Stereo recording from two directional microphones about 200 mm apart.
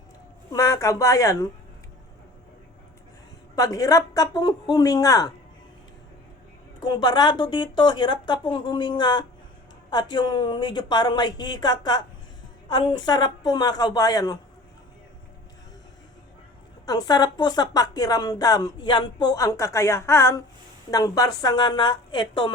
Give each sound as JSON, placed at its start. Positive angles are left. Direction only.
{"t": 0.5, "sound": "speech", "side_deg": 15}
{"t": 3.5, "sound": "speech", "side_deg": 15}
{"t": 6.7, "sound": "speech", "side_deg": 20}
{"t": 16.8, "sound": "speech", "side_deg": 20}